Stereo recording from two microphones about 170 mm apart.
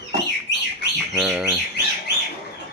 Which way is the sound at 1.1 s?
5° right (ahead or behind).